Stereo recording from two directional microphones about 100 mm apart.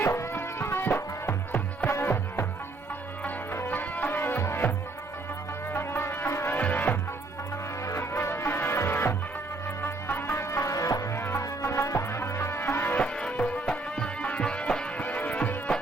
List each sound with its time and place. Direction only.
0.0 s music: 25° left (ahead or behind)
5.7 s music: 25° left (ahead or behind)